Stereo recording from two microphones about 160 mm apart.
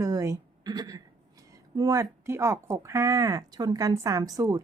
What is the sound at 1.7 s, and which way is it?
Speech, 20° right (ahead or behind).